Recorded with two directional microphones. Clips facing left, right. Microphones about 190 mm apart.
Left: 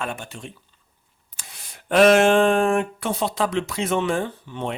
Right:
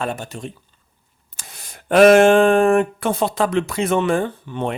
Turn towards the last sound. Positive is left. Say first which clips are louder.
# right 5 dB
turn(degrees=-55)  # may be behind; listen again after turning